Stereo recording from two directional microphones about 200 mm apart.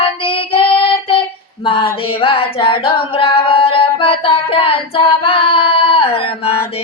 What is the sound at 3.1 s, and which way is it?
Singing, 30° left (ahead or behind).